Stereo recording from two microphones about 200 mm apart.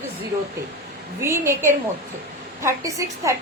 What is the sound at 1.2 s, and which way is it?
A woman's voice, 15° right (ahead or behind).